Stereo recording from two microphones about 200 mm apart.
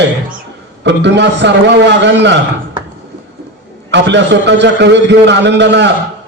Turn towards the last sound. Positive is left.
turn(degrees=-60)  # may be behind; listen again after turning